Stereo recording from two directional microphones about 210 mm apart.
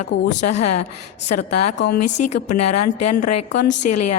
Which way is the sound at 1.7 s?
55° left (ahead or behind).